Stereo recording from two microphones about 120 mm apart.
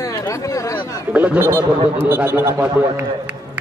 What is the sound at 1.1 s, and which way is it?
A man's voice, 10° right (ahead or behind).